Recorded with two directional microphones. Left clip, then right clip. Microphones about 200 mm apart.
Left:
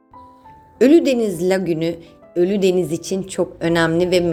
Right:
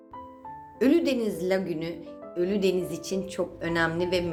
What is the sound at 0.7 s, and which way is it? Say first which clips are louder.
A woman's voice: left 10 dB; 40° left (ahead or behind).